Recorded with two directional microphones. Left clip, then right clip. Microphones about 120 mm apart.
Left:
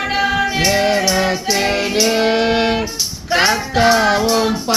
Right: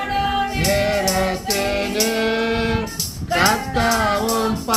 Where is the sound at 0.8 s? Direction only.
40° left (ahead or behind).